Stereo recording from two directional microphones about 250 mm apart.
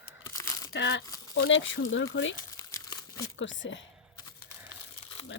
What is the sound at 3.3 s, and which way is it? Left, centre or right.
Speech, left.